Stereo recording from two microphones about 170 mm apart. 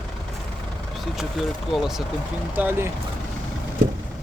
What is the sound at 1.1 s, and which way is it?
Speech, centre (ahead or behind).